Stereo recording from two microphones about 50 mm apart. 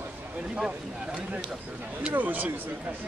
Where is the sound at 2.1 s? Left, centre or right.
Right.